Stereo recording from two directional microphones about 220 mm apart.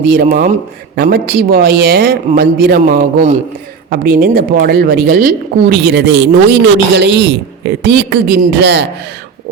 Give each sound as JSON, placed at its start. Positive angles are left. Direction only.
{"t": 0.0, "sound": "speech", "side_deg": -45}
{"t": 3.8, "sound": "speech", "side_deg": -45}